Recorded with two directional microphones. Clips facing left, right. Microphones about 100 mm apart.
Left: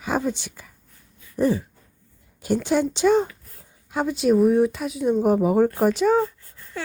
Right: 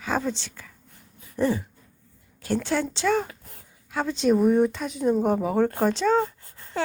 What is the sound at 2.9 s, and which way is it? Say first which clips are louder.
Speech: left 5 dB; 20° left (ahead or behind).